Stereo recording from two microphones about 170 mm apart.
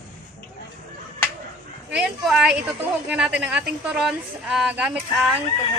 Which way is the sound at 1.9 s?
5° right (ahead or behind).